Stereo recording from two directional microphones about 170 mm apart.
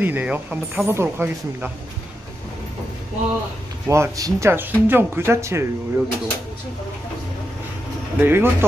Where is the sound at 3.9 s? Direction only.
20° right (ahead or behind).